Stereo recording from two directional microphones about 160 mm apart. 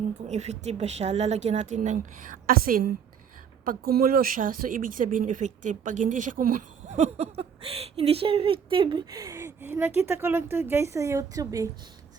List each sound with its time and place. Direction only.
0.3 s speech: 45° right (ahead or behind); by 11.7 s 20° right (ahead or behind)